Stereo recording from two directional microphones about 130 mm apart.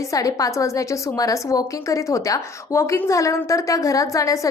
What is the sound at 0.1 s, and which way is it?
A woman's voice, 25° left (ahead or behind).